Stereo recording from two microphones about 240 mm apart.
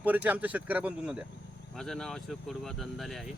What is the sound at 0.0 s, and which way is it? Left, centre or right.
Speech, centre.